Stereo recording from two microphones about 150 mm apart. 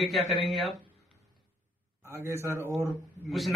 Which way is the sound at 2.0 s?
20° right (ahead or behind).